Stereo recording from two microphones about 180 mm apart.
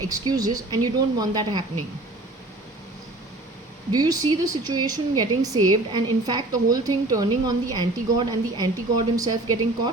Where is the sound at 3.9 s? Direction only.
20° right (ahead or behind).